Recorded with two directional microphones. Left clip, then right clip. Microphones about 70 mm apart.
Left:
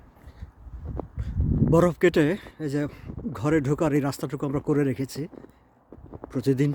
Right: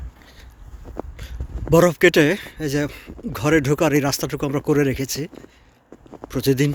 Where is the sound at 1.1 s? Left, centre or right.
Left.